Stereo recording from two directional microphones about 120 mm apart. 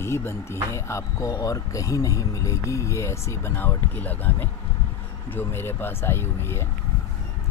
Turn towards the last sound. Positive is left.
turn(degrees=20)  # may be behind; listen again after turning